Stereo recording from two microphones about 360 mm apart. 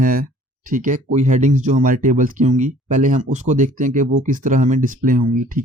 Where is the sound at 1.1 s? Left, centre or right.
Centre.